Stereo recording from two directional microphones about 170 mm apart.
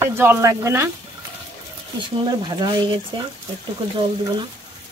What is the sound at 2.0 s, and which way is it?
Speech, 25° right (ahead or behind).